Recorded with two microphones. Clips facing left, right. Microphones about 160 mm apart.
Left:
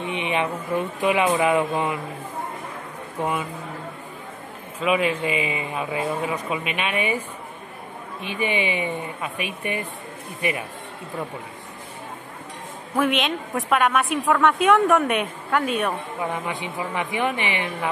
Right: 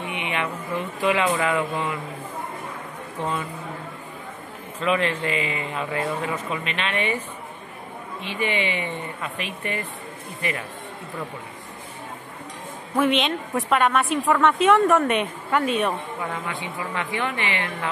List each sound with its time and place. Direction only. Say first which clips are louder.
0.0 s speech: left 3 dB; 20° left (ahead or behind)
4.7 s a man's voice: left 1 dB; 10° left (ahead or behind)
8.3 s a man's voice: left 1 dB; 15° left (ahead or behind)
13.0 s a woman's voice: right 1 dB; 5° left (ahead or behind)
16.2 s a man's voice: left 3 dB; 20° left (ahead or behind)